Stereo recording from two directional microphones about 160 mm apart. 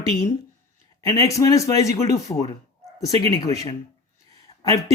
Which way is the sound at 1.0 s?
20° left (ahead or behind).